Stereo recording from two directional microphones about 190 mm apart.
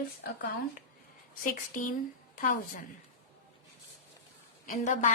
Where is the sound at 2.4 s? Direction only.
45° left (ahead or behind).